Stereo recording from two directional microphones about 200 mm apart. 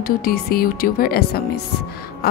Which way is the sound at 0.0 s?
50° left (ahead or behind).